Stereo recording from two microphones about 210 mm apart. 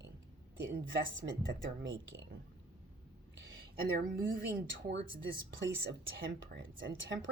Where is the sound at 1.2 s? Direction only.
30° right (ahead or behind).